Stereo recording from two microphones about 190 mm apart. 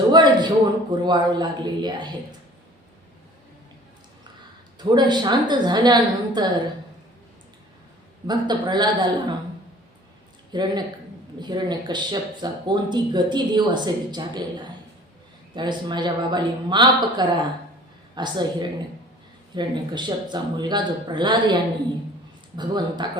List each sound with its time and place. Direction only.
0.1 s speech: 25° right (ahead or behind)
4.8 s speech: 25° right (ahead or behind)
8.3 s speech: 25° right (ahead or behind)
10.5 s speech: 20° right (ahead or behind)
15.5 s speech: 25° right (ahead or behind)